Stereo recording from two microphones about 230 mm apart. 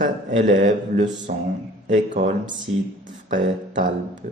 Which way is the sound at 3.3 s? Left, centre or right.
Right.